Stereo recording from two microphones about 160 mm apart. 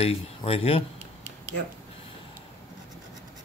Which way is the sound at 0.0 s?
35° left (ahead or behind).